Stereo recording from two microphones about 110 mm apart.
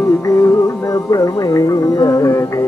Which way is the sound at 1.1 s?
30° left (ahead or behind).